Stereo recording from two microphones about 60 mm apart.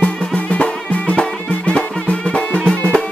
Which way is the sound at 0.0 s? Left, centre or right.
Centre.